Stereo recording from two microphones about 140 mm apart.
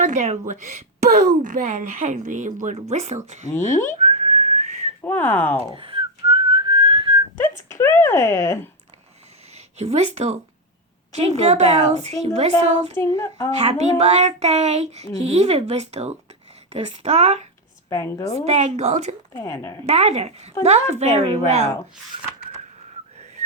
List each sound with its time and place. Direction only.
0.0 s a woman's voice: 60° right (ahead or behind)
2.9 s child singing: 50° right (ahead or behind)
3.2 s a woman's voice: 55° right (ahead or behind)
4.0 s whistling: 55° right (ahead or behind)
5.0 s speech: 10° left (ahead or behind)
5.5 s whistling: 40° right (ahead or behind)
7.7 s speech: 15° left (ahead or behind)
9.7 s child singing: 50° right (ahead or behind)
12.9 s child singing: 20° left (ahead or behind)
13.6 s child singing: 50° right (ahead or behind)
17.8 s child singing: 20° left (ahead or behind)
18.4 s child singing: 55° right (ahead or behind)
19.4 s child singing: 20° left (ahead or behind)
19.8 s child singing: 50° right (ahead or behind)